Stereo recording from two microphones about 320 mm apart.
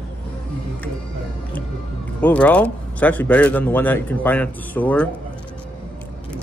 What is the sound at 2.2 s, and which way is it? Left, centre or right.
Speech, centre.